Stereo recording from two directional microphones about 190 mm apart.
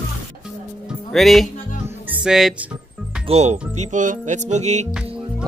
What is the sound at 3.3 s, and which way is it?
Speech, 35° right (ahead or behind).